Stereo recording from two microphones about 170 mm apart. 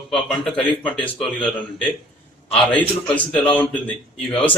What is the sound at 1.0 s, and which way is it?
Speech, 30° left (ahead or behind).